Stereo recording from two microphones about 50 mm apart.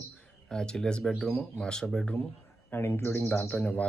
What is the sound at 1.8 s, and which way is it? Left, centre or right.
Speech, centre.